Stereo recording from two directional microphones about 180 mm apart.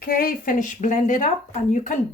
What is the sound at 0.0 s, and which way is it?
Speech, 55° left (ahead or behind).